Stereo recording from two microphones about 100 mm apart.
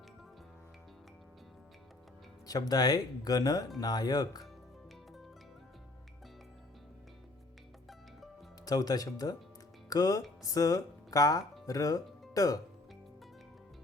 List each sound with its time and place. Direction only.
2.5 s speech: 40° left (ahead or behind)
8.6 s speech: 40° left (ahead or behind)